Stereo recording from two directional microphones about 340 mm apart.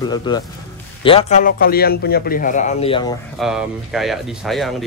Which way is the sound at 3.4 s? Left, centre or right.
Centre.